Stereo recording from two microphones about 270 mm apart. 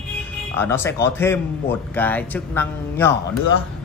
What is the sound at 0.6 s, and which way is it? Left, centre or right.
Speech, centre.